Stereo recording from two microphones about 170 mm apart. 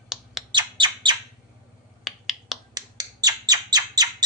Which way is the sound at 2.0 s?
Centre (ahead or behind).